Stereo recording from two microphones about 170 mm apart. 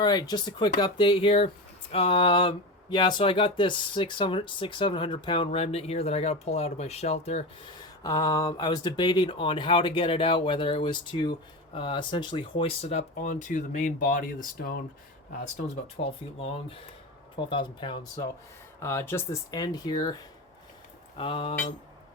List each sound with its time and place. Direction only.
0.0 s speech: 25° left (ahead or behind); by 7.7 s 40° left (ahead or behind)
7.7 s speech: 25° left (ahead or behind); by 14.8 s 60° left (ahead or behind)
15.5 s speech: 40° left (ahead or behind)
18.8 s speech: 15° left (ahead or behind)
21.2 s speech: 30° left (ahead or behind)